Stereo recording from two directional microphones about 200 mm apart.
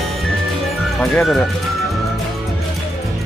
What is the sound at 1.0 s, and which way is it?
Music, 5° left (ahead or behind).